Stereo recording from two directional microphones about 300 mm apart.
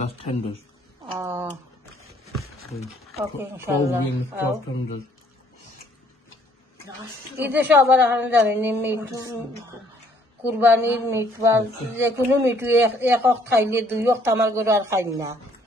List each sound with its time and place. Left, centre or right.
0.0 s a man's voice: centre
1.1 s speech: centre
3.1 s speech: centre
7.3 s speech: centre
10.6 s speech: centre